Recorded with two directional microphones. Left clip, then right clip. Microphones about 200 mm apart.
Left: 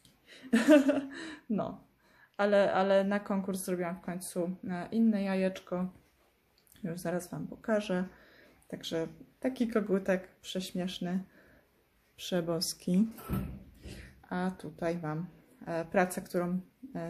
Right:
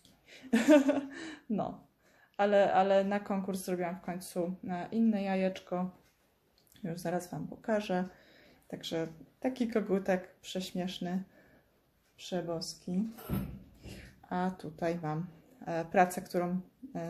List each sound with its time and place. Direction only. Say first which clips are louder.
0.3 s a woman's voice: left 1 dB; 5° left (ahead or behind)
12.2 s speech: left 4 dB; 30° left (ahead or behind)
13.8 s a woman's voice: right 1 dB; 5° left (ahead or behind)